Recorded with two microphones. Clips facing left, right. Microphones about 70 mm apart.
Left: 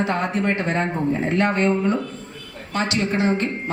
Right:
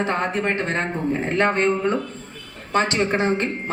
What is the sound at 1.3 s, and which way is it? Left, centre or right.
A man's voice, right.